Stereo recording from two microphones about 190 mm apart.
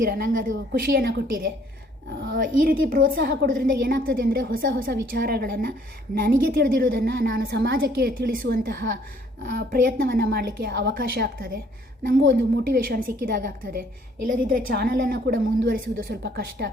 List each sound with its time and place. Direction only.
0.0 s a woman's voice: 50° right (ahead or behind); by 2.4 s 65° right (ahead or behind)
2.8 s a woman's voice: 50° right (ahead or behind)
4.7 s a woman's voice: 60° right (ahead or behind)